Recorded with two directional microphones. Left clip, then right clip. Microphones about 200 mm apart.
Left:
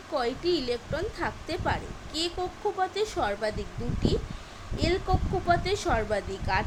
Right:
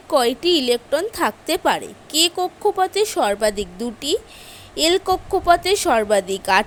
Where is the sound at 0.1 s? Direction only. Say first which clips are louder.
Right 11 dB; 45° right (ahead or behind).